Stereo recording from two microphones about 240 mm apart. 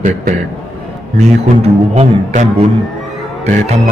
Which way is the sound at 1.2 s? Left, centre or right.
Right.